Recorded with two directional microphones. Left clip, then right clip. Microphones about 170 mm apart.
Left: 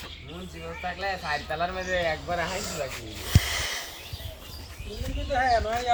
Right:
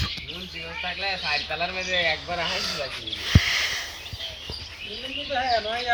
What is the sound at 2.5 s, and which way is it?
Speech, 15° left (ahead or behind).